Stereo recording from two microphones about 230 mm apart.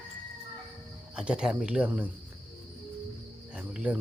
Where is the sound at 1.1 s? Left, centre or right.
Centre.